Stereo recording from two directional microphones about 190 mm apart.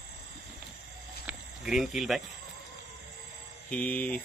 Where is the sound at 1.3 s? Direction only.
5° right (ahead or behind).